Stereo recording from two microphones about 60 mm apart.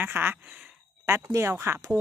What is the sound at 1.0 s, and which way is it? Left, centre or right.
Speech, right.